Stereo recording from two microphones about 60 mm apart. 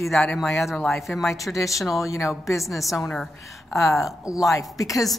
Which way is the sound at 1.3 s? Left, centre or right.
Left.